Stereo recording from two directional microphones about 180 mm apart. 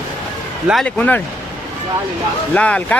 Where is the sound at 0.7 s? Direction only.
5° left (ahead or behind).